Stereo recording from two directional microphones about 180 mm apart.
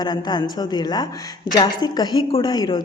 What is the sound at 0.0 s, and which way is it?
A man's voice, 25° left (ahead or behind).